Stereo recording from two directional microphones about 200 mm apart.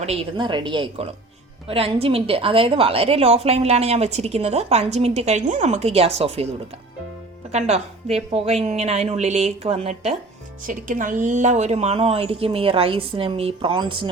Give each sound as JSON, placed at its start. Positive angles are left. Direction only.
{"t": 0.0, "sound": "a woman's voice", "side_deg": -30}
{"t": 7.5, "sound": "a woman's voice", "side_deg": -35}